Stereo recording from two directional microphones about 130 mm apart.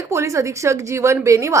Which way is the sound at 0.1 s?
20° right (ahead or behind).